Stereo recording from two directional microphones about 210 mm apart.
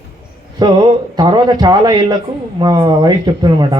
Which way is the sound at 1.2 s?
20° right (ahead or behind).